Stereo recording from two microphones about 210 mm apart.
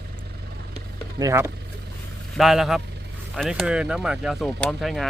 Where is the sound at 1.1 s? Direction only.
15° right (ahead or behind).